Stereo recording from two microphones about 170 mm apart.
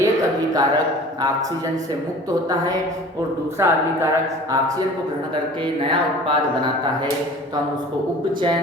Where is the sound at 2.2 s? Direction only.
20° right (ahead or behind).